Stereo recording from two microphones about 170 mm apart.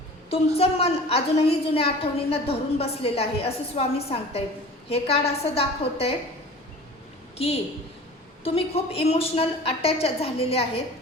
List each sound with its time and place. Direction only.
0.3 s a woman's voice: 35° left (ahead or behind)
7.3 s a woman's voice: 35° left (ahead or behind)